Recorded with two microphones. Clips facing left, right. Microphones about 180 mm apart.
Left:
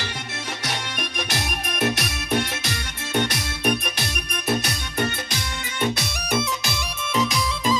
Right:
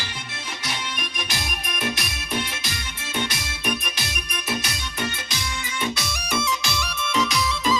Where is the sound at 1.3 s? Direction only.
70° left (ahead or behind).